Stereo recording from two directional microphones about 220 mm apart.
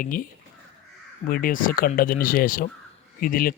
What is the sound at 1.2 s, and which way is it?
Speech, 40° left (ahead or behind).